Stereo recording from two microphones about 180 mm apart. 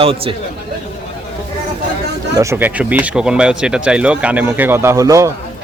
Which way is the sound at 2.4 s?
15° right (ahead or behind).